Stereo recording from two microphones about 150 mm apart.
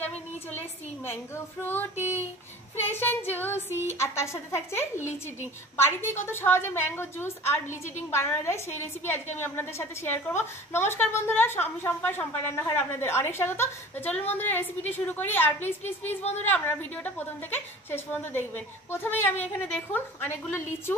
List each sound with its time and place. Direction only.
0.0 s speech: 10° left (ahead or behind)
2.0 s speech: 15° right (ahead or behind)
2.9 s a woman's voice: 15° left (ahead or behind)